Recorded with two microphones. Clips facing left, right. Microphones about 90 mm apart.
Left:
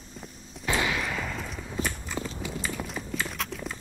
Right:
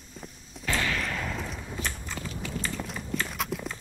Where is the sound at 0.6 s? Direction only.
15° left (ahead or behind); by 1.8 s centre (ahead or behind).